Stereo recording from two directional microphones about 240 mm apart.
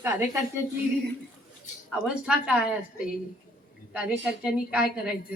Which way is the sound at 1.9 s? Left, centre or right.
Centre.